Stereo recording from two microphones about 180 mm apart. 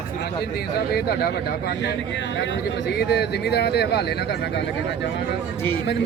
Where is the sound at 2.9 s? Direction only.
70° left (ahead or behind).